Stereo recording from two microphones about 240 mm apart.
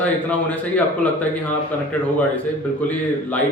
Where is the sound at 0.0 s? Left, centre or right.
Centre.